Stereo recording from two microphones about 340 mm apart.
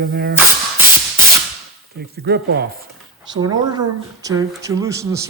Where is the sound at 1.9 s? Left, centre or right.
Right.